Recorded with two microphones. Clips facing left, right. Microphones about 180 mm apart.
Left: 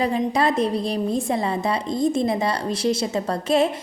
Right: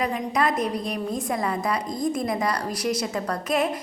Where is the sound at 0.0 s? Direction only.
30° left (ahead or behind).